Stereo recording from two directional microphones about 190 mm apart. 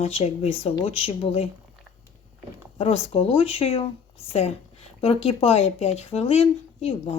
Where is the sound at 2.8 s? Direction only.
30° left (ahead or behind).